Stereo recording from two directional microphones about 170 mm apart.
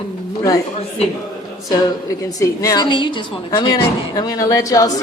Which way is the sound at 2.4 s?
20° left (ahead or behind).